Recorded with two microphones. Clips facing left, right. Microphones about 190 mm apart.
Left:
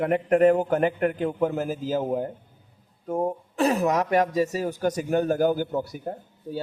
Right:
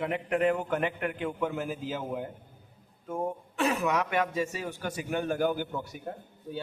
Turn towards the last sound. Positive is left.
turn(degrees=35)  # may be behind; listen again after turning